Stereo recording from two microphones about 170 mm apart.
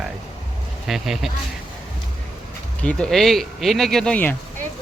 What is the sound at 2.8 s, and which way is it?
Speech, 5° left (ahead or behind).